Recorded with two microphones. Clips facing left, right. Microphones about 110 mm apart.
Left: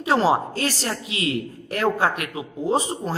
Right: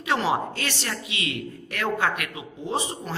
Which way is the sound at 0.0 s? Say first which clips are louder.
Left 5 dB; 35° left (ahead or behind).